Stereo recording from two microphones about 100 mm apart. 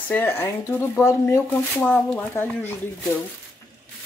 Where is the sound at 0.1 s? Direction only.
20° left (ahead or behind).